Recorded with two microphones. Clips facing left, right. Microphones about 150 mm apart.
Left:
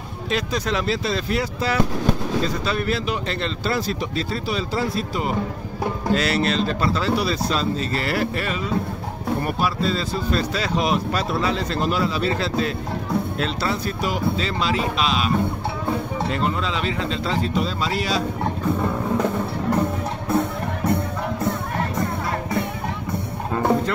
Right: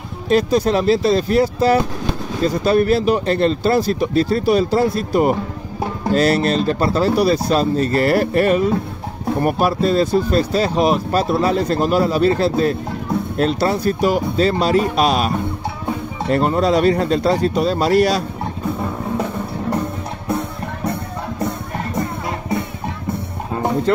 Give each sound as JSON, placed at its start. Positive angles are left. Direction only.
{"t": 0.3, "sound": "speech", "side_deg": -40}
{"t": 17.6, "sound": "speech", "side_deg": -55}